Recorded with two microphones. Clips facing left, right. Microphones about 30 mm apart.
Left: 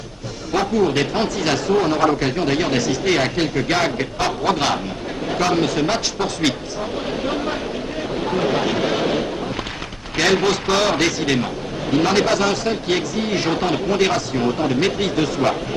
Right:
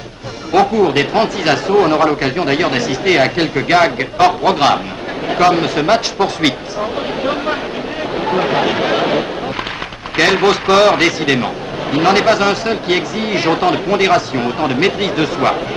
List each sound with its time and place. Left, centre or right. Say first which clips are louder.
0.5 s speech: right 6 dB; right
8.3 s speech: right 5 dB; right